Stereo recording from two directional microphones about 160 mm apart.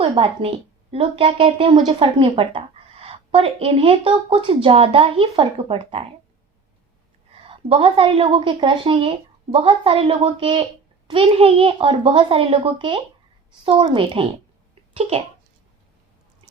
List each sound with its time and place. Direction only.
0.0 s a woman's voice: 35° right (ahead or behind)
7.4 s a woman's voice: 30° right (ahead or behind)